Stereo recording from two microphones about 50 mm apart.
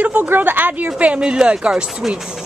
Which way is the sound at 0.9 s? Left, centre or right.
Right.